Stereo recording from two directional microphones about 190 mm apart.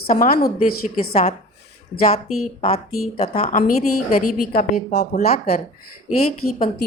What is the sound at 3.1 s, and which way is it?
Speech, 30° left (ahead or behind).